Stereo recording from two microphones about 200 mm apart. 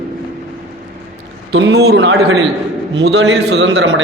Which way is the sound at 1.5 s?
55° right (ahead or behind).